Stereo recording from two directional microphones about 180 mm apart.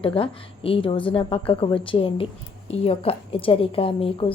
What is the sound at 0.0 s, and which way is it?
A woman's voice, 30° left (ahead or behind).